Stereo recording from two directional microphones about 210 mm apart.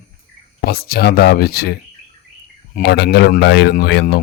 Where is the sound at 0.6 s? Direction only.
45° left (ahead or behind).